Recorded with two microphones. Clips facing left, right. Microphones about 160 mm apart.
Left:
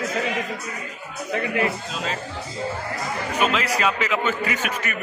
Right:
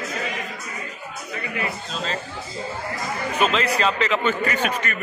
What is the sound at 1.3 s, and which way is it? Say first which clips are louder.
Speech: left 6 dB; 70° left (ahead or behind).